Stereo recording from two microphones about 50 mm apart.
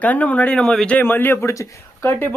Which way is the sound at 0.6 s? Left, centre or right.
Centre.